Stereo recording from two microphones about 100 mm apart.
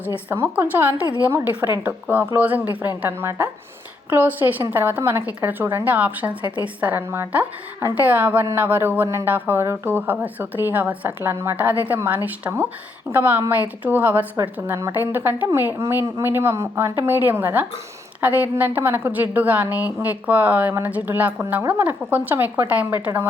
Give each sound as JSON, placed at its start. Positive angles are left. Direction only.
{"t": 0.3, "sound": "a woman's voice", "side_deg": -20}
{"t": 14.7, "sound": "a woman's voice", "side_deg": -30}